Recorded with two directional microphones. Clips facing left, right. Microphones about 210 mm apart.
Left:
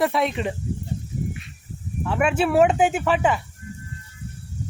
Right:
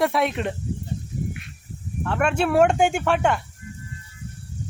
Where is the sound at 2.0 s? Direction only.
5° left (ahead or behind).